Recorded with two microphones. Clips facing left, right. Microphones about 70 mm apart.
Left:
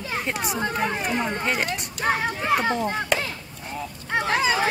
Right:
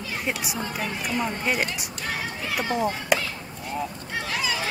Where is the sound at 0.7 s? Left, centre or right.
Left.